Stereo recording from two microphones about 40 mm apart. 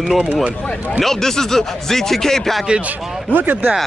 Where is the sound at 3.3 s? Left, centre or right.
Right.